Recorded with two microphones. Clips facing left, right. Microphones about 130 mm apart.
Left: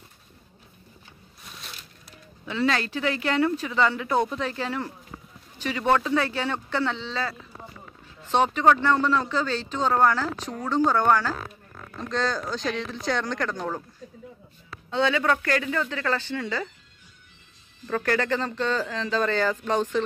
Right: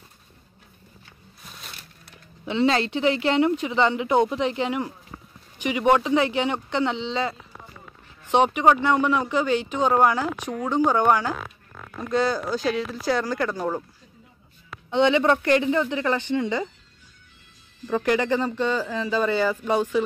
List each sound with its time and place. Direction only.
2.4 s speech: 25° right (ahead or behind); by 13.8 s 10° right (ahead or behind)
14.9 s speech: 20° right (ahead or behind)
17.8 s speech: 15° right (ahead or behind)